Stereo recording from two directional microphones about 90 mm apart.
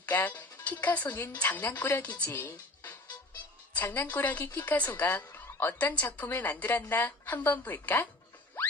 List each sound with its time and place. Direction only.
0.0 s a woman's voice: 20° left (ahead or behind)